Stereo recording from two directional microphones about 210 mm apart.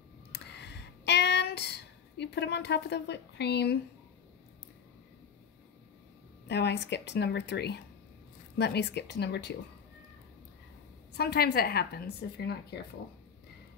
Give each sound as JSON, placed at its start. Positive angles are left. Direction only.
{"t": 0.3, "sound": "a sound", "side_deg": 55}
{"t": 6.4, "sound": "a woman's voice", "side_deg": 55}
{"t": 11.1, "sound": "a woman's voice", "side_deg": 50}